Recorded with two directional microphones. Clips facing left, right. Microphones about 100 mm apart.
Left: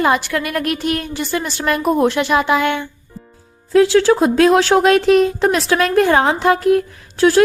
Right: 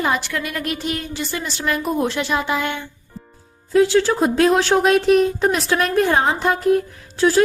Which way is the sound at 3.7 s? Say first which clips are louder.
Left 4 dB; 90° left.